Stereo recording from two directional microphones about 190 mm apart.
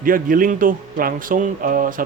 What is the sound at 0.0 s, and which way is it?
Speech, 45° right (ahead or behind).